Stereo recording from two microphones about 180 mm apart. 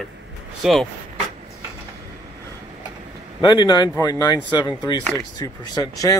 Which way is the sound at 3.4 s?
25° left (ahead or behind).